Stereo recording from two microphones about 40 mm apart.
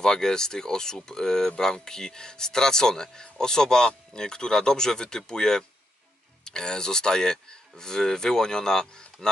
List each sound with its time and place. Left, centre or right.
0.0 s speech: centre